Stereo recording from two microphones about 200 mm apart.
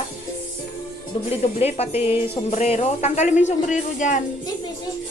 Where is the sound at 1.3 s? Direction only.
30° left (ahead or behind).